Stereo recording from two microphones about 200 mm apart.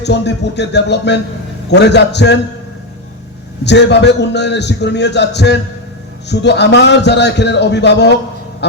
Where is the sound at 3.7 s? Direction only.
60° left (ahead or behind).